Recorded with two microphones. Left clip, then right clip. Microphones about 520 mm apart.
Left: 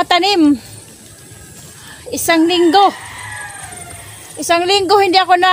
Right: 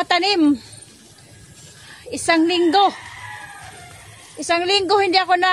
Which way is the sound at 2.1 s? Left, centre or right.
Right.